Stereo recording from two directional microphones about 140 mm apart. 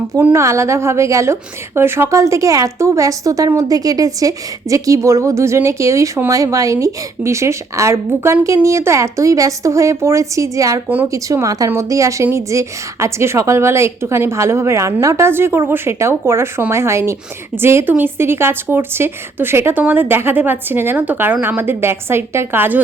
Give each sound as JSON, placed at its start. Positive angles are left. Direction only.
{"t": 0.1, "sound": "a woman's voice", "side_deg": -15}
{"t": 10.8, "sound": "a woman's voice", "side_deg": -10}
{"t": 11.1, "sound": "a woman's voice", "side_deg": -25}